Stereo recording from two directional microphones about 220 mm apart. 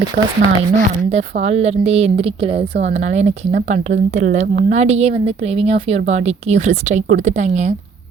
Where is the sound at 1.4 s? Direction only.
30° right (ahead or behind).